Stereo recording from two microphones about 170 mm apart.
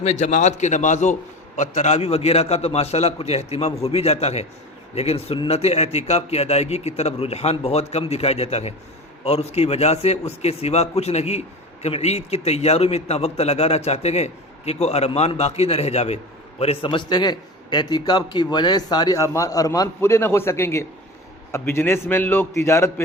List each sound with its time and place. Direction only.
0.0 s a man's voice: 40° left (ahead or behind); by 23.0 s 15° left (ahead or behind)